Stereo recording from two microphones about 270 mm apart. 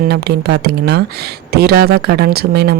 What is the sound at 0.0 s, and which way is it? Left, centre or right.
A woman's voice, right.